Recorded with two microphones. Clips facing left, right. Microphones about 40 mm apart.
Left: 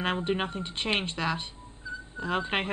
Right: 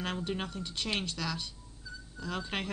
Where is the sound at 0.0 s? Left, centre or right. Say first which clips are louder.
Left 7 dB; left.